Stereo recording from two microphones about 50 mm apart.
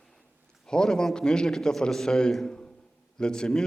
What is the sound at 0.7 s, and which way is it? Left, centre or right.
A man's voice, centre.